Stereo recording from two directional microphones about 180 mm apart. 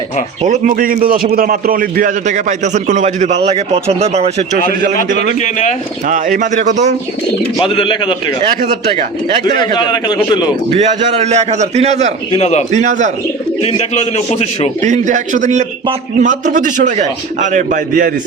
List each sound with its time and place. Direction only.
0.4 s a man's voice: 45° right (ahead or behind)
4.9 s a man's voice: 40° left (ahead or behind)
6.1 s a man's voice: 45° right (ahead or behind)
7.6 s a man's voice: 30° left (ahead or behind)
9.4 s a man's voice: 25° left (ahead or behind)
10.7 s a man's voice: 35° right (ahead or behind)
12.3 s a man's voice: 35° left (ahead or behind)
12.7 s a man's voice: 40° right (ahead or behind)
13.6 s a man's voice: 35° left (ahead or behind)
14.8 s a man's voice: 40° right (ahead or behind)